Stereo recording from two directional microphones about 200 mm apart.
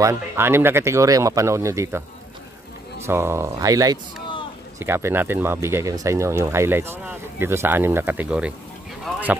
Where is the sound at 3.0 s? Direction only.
10° right (ahead or behind).